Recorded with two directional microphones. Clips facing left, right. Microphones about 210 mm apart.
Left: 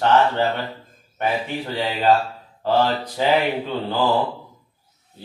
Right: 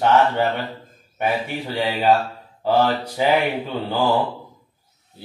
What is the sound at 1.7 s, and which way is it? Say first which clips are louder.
Speech: even; 10° right (ahead or behind).